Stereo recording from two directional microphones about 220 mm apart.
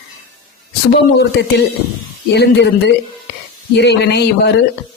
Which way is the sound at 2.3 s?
50° left (ahead or behind).